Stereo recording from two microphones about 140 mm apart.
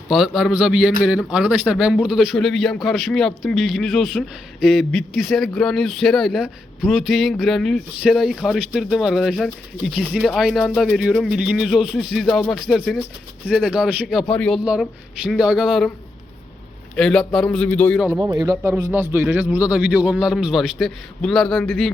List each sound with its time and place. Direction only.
0.1 s a man's voice: centre (ahead or behind)
14.6 s a man's voice: 5° right (ahead or behind)
16.9 s a man's voice: 5° left (ahead or behind)
18.2 s speech: 30° right (ahead or behind)
18.6 s a man's voice: 15° right (ahead or behind); by 21.9 s 5° left (ahead or behind)